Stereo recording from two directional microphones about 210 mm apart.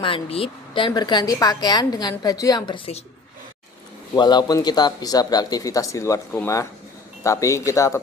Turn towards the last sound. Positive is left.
turn(degrees=15)  # may be behind; listen again after turning